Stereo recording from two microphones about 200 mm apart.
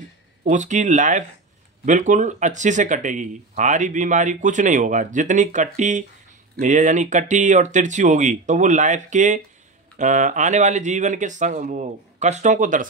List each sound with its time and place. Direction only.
0.4 s speech: 40° right (ahead or behind)